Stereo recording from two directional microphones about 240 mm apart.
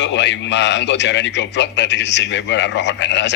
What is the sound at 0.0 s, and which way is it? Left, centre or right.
A man's voice, left.